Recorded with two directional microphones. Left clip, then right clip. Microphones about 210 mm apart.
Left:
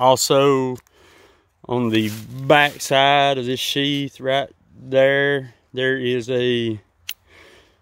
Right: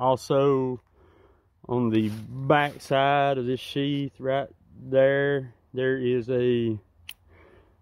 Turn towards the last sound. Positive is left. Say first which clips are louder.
# left 8 dB
turn(degrees=30)  # may be behind; listen again after turning